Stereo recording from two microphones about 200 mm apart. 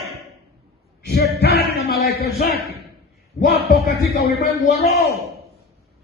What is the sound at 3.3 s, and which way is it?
Speech, 50° left (ahead or behind).